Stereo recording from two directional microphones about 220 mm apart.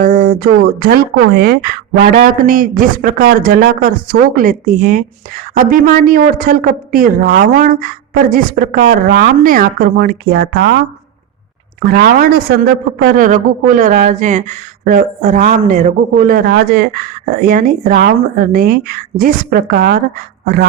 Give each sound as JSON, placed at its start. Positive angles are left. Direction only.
{"t": 0.0, "sound": "a woman's voice", "side_deg": -40}
{"t": 11.9, "sound": "a woman's voice", "side_deg": -45}